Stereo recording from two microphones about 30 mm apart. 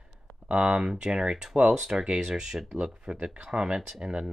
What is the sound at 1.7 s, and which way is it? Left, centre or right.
Speech, centre.